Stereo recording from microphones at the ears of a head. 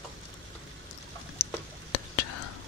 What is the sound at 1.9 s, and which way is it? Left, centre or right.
Whispering, left.